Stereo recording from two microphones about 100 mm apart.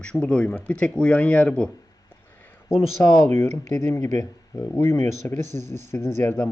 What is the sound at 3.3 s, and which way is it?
Speech, 30° left (ahead or behind).